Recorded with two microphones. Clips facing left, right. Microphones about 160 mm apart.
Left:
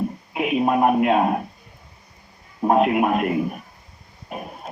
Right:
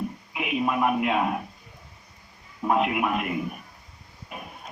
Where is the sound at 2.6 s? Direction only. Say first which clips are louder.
Left 6 dB; 45° left (ahead or behind).